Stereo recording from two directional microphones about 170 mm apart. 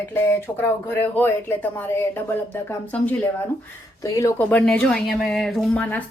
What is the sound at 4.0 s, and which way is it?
Speech, 20° left (ahead or behind).